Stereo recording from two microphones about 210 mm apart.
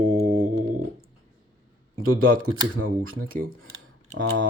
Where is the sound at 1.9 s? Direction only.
75° right (ahead or behind).